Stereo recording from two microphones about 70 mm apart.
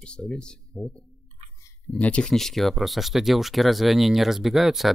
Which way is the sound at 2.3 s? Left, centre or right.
Centre.